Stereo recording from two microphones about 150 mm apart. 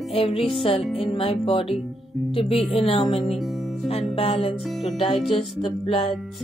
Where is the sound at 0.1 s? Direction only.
40° left (ahead or behind).